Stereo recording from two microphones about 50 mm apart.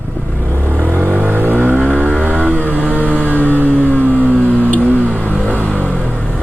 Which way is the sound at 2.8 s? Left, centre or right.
Right.